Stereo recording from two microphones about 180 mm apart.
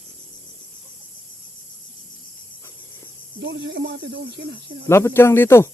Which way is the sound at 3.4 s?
75° right (ahead or behind).